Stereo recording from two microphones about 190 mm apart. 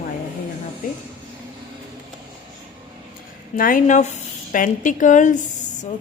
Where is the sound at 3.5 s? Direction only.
45° left (ahead or behind).